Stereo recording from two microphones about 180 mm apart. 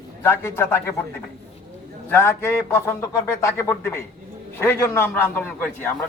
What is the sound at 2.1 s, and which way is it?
A man's voice, 10° left (ahead or behind).